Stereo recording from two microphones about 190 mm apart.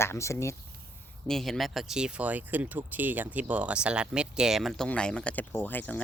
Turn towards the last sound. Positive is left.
turn(degrees=10)  # may be behind; listen again after turning